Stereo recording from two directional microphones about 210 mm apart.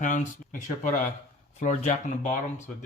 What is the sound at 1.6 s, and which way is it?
Speech, 35° left (ahead or behind).